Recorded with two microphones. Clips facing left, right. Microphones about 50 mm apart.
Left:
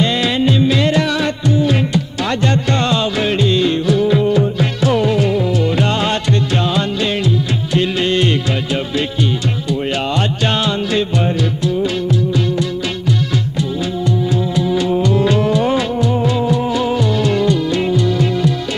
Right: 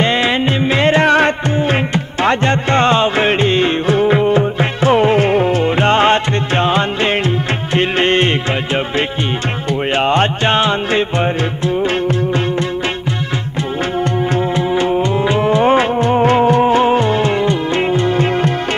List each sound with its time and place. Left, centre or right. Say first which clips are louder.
0.0 s music: right 1 dB; right
14.3 s music: right 1 dB; right